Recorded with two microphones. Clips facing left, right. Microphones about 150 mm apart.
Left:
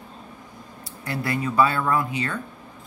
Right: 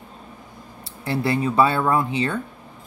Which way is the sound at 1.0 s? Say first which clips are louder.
Right 5 dB; 25° right (ahead or behind).